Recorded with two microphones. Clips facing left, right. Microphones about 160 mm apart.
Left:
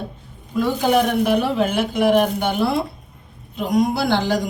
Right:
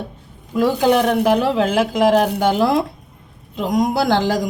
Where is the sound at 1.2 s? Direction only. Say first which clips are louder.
Right 2 dB; 90° right.